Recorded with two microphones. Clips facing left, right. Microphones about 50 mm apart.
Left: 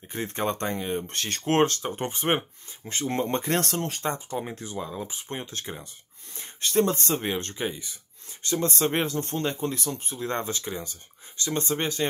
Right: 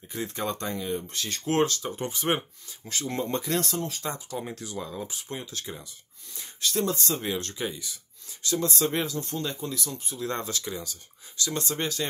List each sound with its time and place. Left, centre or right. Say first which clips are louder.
0.1 s speech: left 3 dB; left
4.0 s speech: left 4 dB; left
4.7 s speech: left 2 dB; centre
5.4 s speech: left 2 dB; left